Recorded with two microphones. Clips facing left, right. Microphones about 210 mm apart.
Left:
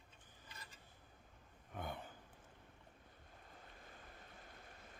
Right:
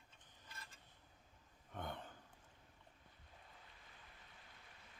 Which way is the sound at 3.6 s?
45° left (ahead or behind).